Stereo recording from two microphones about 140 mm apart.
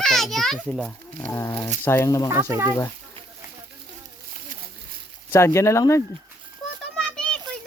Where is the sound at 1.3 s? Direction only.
15° left (ahead or behind).